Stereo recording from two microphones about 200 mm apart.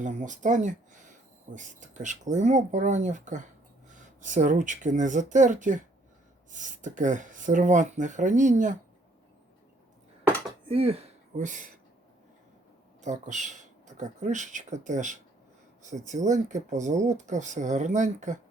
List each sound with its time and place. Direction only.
0.0 s speech: 40° right (ahead or behind)
10.7 s speech: 30° right (ahead or behind)
13.0 s speech: 35° right (ahead or behind)